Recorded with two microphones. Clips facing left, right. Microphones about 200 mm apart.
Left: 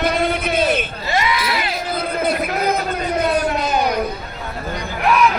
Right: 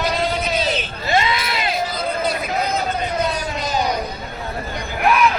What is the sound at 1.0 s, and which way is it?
Speech, 20° right (ahead or behind).